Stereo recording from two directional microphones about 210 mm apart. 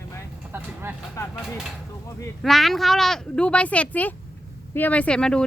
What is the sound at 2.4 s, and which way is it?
A woman's voice, centre (ahead or behind).